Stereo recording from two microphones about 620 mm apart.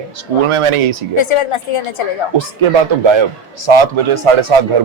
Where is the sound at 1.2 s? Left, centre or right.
Left.